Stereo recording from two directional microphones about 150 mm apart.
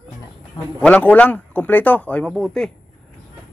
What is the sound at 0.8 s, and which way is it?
Speech, 10° left (ahead or behind).